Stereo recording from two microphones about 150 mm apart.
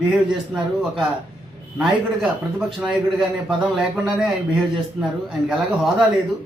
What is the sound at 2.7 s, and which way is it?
A man's voice, 5° right (ahead or behind).